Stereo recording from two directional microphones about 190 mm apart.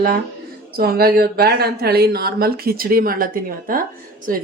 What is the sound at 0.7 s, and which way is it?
Speech, 50° right (ahead or behind).